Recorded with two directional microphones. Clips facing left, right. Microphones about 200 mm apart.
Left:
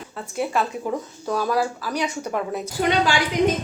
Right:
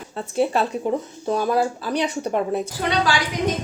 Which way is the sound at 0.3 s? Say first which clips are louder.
Right 4 dB; 25° right (ahead or behind).